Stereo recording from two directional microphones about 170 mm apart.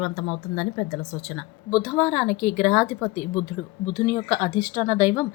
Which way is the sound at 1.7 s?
10° right (ahead or behind).